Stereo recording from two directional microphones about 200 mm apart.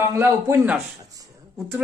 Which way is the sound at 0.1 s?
15° right (ahead or behind).